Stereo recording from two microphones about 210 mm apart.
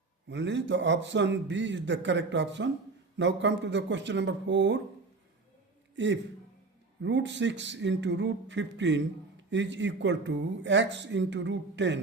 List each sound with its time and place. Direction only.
0.3 s speech: 55° right (ahead or behind)
7.0 s speech: 60° right (ahead or behind)